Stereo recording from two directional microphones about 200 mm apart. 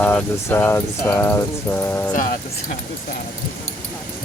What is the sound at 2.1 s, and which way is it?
Speech, 40° left (ahead or behind).